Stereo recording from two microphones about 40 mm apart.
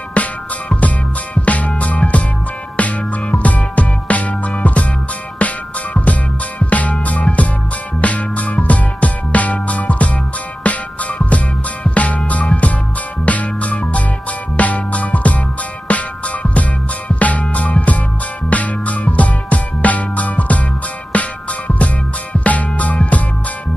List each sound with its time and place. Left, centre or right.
0.1 s music: left
6.7 s music: left
17.1 s music: left